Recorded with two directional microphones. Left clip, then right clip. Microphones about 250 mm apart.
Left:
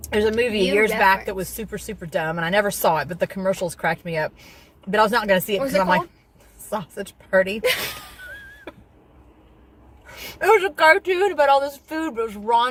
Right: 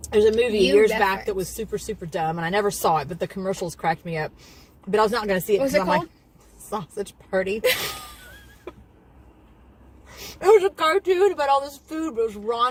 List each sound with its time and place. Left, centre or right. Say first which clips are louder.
0.1 s speech: right 2 dB; centre
10.4 s speech: left 2 dB; centre